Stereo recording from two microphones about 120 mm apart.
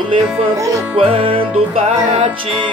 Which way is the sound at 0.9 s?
50° right (ahead or behind).